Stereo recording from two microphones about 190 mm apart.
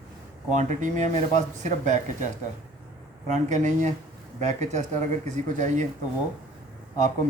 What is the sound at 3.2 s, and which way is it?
Speech, 40° right (ahead or behind).